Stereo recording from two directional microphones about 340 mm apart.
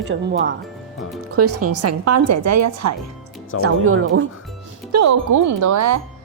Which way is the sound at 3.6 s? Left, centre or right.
Right.